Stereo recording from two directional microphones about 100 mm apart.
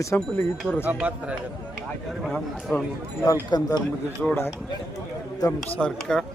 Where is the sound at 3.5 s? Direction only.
45° left (ahead or behind).